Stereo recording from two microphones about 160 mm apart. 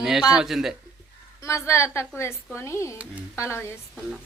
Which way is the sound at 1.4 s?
20° left (ahead or behind).